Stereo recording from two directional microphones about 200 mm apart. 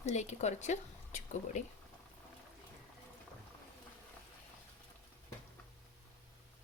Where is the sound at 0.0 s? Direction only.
35° left (ahead or behind).